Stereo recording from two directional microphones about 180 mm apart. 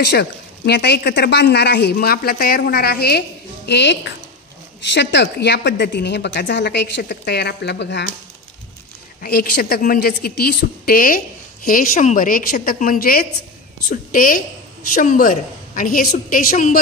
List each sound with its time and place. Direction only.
0.0 s speech: 65° left (ahead or behind)
9.2 s a woman's voice: 55° left (ahead or behind)